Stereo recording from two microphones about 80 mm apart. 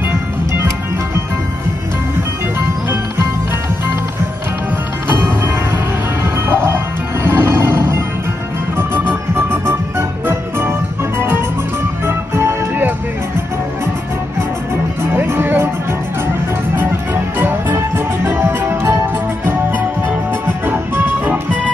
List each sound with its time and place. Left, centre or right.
6.2 s music: right
15.1 s music: right
16.7 s music: right
20.6 s music: right